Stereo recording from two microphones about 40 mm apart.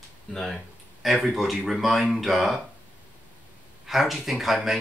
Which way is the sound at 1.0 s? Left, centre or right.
Centre.